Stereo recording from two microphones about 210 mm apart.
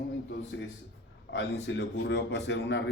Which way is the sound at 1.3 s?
55° left (ahead or behind).